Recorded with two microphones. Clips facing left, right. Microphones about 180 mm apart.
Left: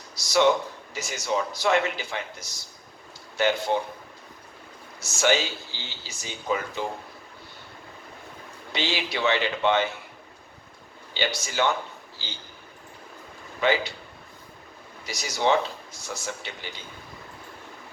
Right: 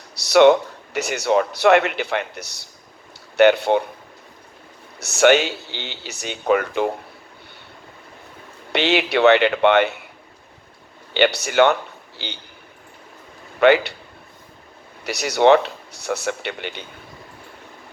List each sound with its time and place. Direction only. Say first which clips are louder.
0.2 s speech: right 8 dB; 65° right (ahead or behind)
4.9 s speech: right 9 dB; 65° right (ahead or behind)
8.7 s speech: right 10 dB; 65° right (ahead or behind)
11.1 s a man's voice: right 11 dB; 65° right (ahead or behind)
13.6 s speech: right 9 dB; 65° right (ahead or behind)
15.0 s speech: right 10 dB; 65° right (ahead or behind)